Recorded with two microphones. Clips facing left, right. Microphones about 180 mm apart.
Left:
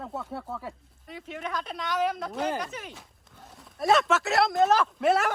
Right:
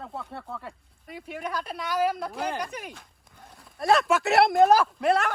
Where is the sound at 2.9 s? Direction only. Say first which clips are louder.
Right 1 dB; centre (ahead or behind).